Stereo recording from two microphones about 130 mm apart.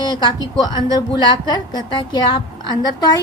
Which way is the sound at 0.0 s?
30° left (ahead or behind).